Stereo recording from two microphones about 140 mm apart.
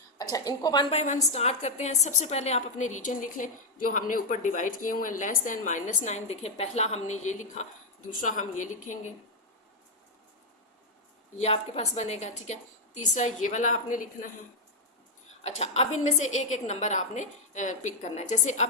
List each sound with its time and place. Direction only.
0.2 s a woman's voice: 25° left (ahead or behind)
0.9 s a woman's voice: 55° left (ahead or behind)
11.3 s a woman's voice: 50° left (ahead or behind); by 14.3 s 70° left (ahead or behind)
15.4 s a woman's voice: 50° left (ahead or behind)